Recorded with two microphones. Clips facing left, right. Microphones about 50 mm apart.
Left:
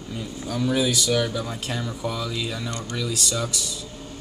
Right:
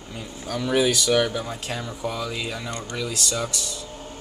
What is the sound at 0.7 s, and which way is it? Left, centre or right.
Speech, right.